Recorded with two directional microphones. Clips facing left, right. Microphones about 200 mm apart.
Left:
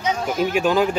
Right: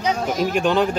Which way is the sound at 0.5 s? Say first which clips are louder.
Left 1 dB; 5° left (ahead or behind).